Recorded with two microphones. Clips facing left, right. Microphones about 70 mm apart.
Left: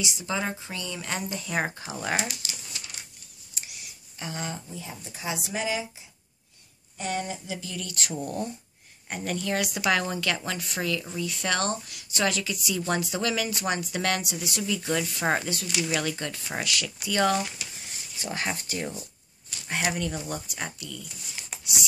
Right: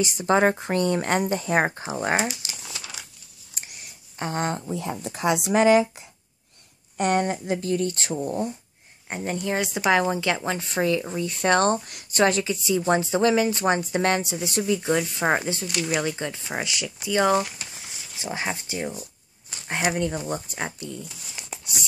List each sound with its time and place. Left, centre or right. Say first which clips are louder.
0.0 s speech: right 10 dB; right
3.5 s a sound: right 1 dB; right
4.6 s a woman's voice: right 10 dB; right; by 19.0 s centre
19.9 s a woman's voice: right 5 dB; right